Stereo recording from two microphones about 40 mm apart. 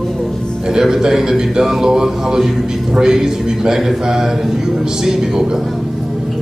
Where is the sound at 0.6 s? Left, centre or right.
Centre.